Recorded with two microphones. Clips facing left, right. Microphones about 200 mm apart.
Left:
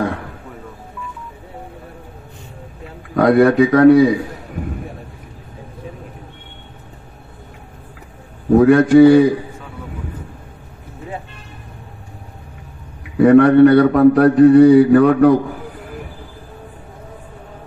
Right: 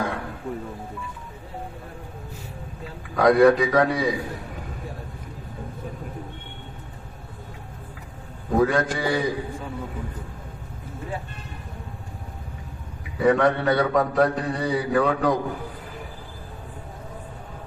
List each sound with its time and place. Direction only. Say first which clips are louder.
3.2 s a man's voice: left 5 dB; 60° left (ahead or behind)
8.5 s a man's voice: left 11 dB; 60° left (ahead or behind)
13.2 s a man's voice: left 12 dB; 60° left (ahead or behind)